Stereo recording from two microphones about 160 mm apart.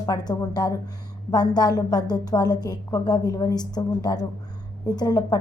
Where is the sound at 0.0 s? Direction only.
25° left (ahead or behind).